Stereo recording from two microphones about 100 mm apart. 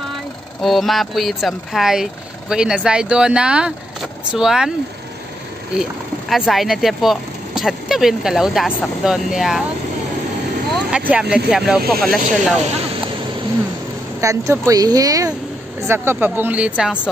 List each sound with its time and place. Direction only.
0.6 s speech: centre (ahead or behind)
5.8 s speech: 5° right (ahead or behind)
10.9 s speech: 10° right (ahead or behind)
14.2 s speech: 30° right (ahead or behind)
15.8 s speech: 25° right (ahead or behind)